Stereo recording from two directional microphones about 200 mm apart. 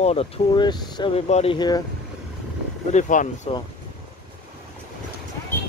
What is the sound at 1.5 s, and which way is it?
Speech, 20° left (ahead or behind).